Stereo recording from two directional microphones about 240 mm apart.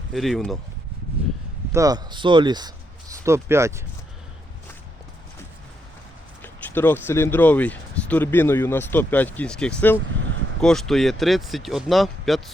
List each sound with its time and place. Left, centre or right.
0.1 s speech: centre
1.7 s speech: centre
6.4 s speech: centre